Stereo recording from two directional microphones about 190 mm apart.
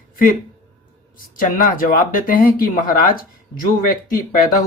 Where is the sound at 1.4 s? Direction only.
45° left (ahead or behind).